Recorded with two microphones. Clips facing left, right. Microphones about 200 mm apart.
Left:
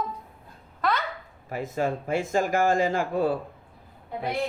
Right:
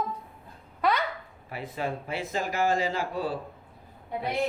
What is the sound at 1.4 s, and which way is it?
Speech, 45° left (ahead or behind).